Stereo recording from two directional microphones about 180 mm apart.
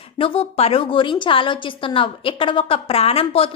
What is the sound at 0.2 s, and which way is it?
A woman's voice, 30° left (ahead or behind).